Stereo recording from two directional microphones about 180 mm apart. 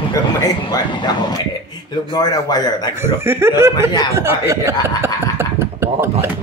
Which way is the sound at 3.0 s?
15° right (ahead or behind).